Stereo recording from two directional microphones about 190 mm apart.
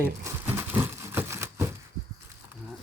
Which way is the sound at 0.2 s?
15° right (ahead or behind).